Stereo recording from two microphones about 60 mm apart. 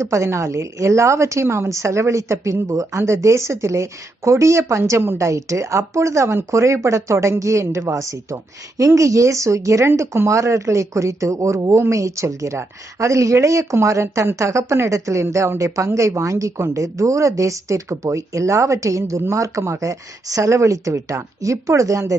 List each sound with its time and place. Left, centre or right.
0.0 s speech: right
3.0 s speech: right